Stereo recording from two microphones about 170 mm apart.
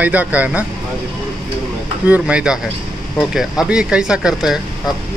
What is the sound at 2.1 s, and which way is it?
Speech, 5° right (ahead or behind).